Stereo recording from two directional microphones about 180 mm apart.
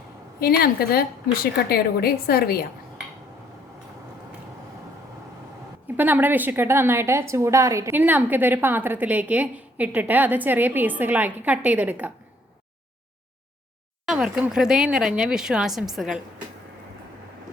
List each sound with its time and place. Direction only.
0.3 s a woman's voice: 55° left (ahead or behind)
6.0 s a woman's voice: 10° right (ahead or behind)
14.0 s speech: 5° right (ahead or behind)